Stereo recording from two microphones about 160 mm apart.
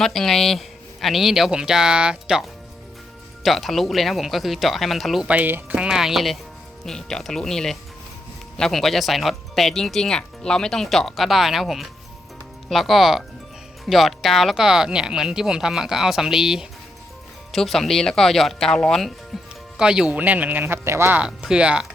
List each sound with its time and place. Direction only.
0.0 s speech: 5° left (ahead or behind)
19.3 s music: centre (ahead or behind)
19.7 s speech: 5° right (ahead or behind)